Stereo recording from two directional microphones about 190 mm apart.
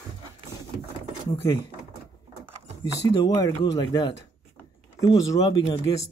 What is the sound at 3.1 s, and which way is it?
Speech, 20° left (ahead or behind).